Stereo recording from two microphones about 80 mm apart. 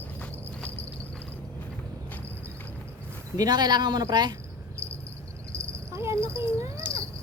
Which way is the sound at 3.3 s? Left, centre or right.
Right.